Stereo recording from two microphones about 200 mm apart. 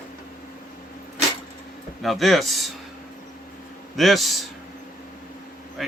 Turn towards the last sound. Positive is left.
turn(degrees=0)  # may be behind; listen again after turning